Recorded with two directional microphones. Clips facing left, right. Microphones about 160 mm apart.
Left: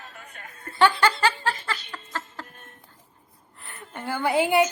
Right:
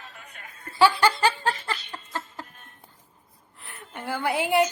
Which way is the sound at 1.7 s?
15° right (ahead or behind).